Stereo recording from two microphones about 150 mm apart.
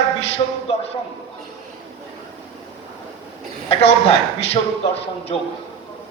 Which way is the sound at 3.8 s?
45° left (ahead or behind).